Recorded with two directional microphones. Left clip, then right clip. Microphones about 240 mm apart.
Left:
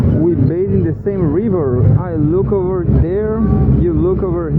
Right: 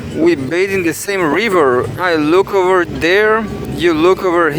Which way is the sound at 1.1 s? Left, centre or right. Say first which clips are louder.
Right 2 dB; right.